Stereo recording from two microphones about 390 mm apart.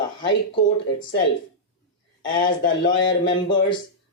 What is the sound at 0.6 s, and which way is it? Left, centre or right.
Speech, left.